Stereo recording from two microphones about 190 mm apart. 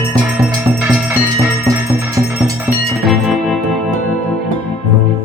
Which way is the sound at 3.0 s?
Centre (ahead or behind).